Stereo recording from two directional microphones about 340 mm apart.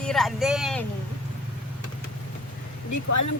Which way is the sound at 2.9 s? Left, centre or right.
Left.